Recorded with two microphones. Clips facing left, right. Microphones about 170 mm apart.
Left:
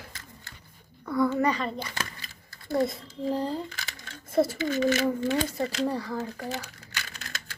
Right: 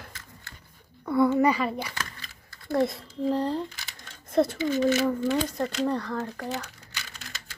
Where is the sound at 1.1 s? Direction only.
25° right (ahead or behind).